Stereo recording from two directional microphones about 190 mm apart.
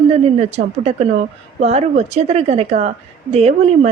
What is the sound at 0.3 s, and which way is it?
A woman's voice, 35° right (ahead or behind).